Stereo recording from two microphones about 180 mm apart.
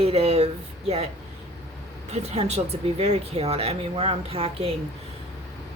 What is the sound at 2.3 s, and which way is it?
A woman's voice, 35° right (ahead or behind).